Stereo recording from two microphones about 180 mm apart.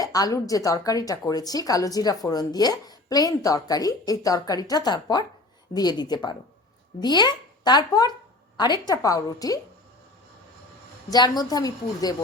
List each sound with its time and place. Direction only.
0.0 s a woman's voice: 20° left (ahead or behind)
11.1 s a woman's voice: 20° left (ahead or behind)